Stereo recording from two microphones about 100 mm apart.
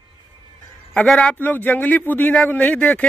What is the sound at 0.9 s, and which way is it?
Speech, 10° left (ahead or behind).